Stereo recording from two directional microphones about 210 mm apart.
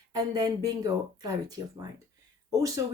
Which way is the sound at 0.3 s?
20° right (ahead or behind).